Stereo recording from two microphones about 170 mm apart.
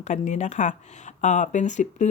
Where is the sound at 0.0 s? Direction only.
45° left (ahead or behind).